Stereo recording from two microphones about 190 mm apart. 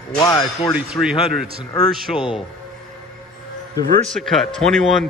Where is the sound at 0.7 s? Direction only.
5° right (ahead or behind).